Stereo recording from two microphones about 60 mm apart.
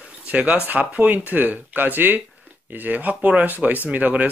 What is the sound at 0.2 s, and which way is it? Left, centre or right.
Speech, right.